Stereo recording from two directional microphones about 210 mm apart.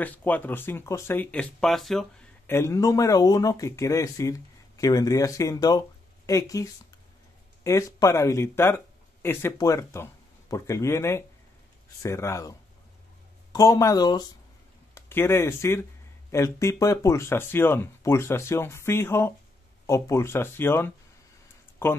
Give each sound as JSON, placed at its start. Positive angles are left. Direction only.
{"t": 0.0, "sound": "speech", "side_deg": 10}
{"t": 2.5, "sound": "speech", "side_deg": 15}